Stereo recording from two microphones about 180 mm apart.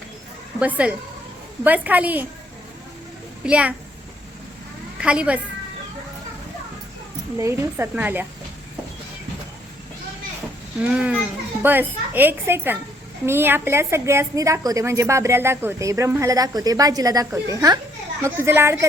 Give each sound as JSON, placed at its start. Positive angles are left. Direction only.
{"t": 0.8, "sound": "a woman's voice", "side_deg": -5}
{"t": 3.4, "sound": "a woman's voice", "side_deg": -5}
{"t": 4.9, "sound": "a woman's voice", "side_deg": -5}
{"t": 7.3, "sound": "a woman's voice", "side_deg": -15}
{"t": 10.8, "sound": "a woman's voice", "side_deg": -5}